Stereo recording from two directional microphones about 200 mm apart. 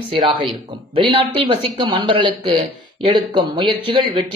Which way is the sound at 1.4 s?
25° right (ahead or behind).